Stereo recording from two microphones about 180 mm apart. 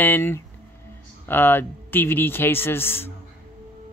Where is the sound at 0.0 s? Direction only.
10° left (ahead or behind).